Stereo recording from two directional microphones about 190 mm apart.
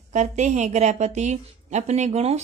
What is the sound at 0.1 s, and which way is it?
A woman's voice, 40° right (ahead or behind).